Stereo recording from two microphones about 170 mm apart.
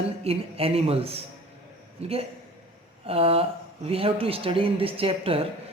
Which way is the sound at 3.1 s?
35° right (ahead or behind).